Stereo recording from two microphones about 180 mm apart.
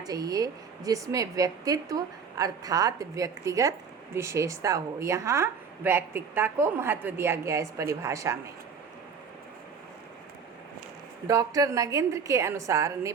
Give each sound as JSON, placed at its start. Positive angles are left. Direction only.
{"t": 0.0, "sound": "a woman's voice", "side_deg": -20}
{"t": 11.3, "sound": "a woman's voice", "side_deg": -20}